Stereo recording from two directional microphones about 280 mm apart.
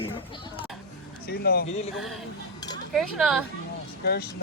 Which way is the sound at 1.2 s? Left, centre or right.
Left.